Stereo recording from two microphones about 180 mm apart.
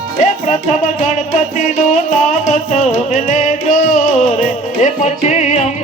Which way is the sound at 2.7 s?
40° left (ahead or behind).